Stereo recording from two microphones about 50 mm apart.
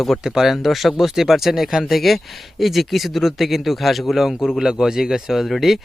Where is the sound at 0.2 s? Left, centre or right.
Centre.